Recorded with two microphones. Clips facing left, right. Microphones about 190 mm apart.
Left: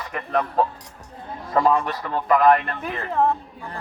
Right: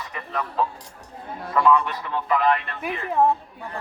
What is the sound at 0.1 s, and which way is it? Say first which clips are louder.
A man's voice: left 8 dB; 50° left (ahead or behind).